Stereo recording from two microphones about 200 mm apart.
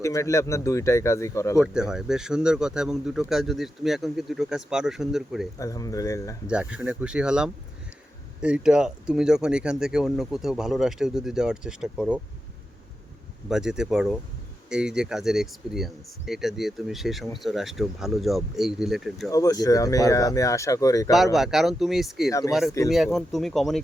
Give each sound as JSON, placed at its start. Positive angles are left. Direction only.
{"t": 0.0, "sound": "speech", "side_deg": 15}
{"t": 1.6, "sound": "speech", "side_deg": -5}
{"t": 5.5, "sound": "speech", "side_deg": 15}
{"t": 6.5, "sound": "speech", "side_deg": -5}
{"t": 13.5, "sound": "speech", "side_deg": -5}
{"t": 19.3, "sound": "speech", "side_deg": 15}
{"t": 21.3, "sound": "speech", "side_deg": 0}
{"t": 22.3, "sound": "speech", "side_deg": 15}
{"t": 22.9, "sound": "speech", "side_deg": 0}